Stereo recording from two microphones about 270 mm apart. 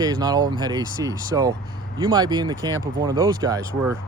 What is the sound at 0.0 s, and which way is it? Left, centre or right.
Speech, centre.